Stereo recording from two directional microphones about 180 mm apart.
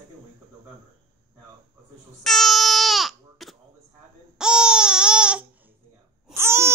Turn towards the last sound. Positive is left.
turn(degrees=-15)  # may be behind; listen again after turning